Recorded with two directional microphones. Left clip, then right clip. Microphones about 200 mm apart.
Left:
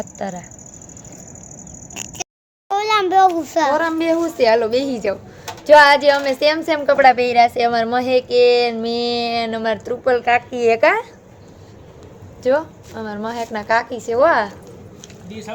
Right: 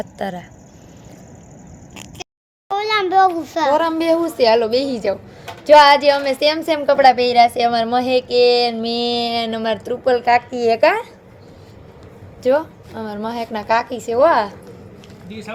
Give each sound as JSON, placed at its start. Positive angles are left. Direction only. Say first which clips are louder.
{"t": 0.0, "sound": "a woman's voice", "louder": "right 1 dB", "side_deg": -15}
{"t": 1.9, "sound": "a sound", "louder": "left 5 dB", "side_deg": 30}
{"t": 3.7, "sound": "a woman's voice", "louder": "right 6 dB", "side_deg": -10}
{"t": 12.4, "sound": "a woman's voice", "louder": "right 1 dB", "side_deg": -15}
{"t": 15.3, "sound": "speech", "louder": "even", "side_deg": 20}